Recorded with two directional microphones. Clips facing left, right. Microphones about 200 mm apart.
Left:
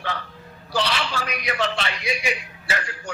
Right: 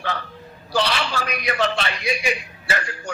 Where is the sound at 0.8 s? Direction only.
50° right (ahead or behind).